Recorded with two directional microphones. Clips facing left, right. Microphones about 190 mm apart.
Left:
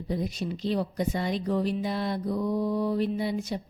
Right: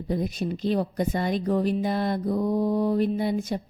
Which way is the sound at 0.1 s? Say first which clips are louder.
Right 3 dB; 50° right (ahead or behind).